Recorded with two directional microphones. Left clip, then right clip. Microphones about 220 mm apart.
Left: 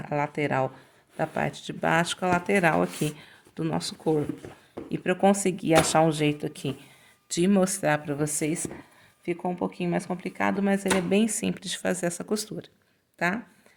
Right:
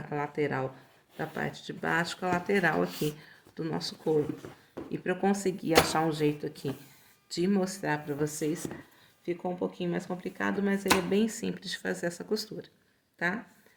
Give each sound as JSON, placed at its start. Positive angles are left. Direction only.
{"t": 0.1, "sound": "speech", "side_deg": 55}